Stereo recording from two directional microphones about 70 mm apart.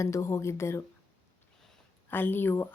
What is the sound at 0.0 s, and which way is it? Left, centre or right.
Speech, left.